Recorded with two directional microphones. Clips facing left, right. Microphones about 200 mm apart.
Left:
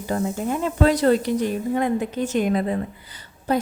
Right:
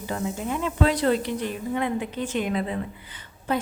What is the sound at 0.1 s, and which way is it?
A woman's voice, 40° left (ahead or behind).